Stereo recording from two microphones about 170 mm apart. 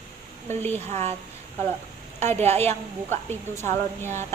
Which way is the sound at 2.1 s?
15° left (ahead or behind).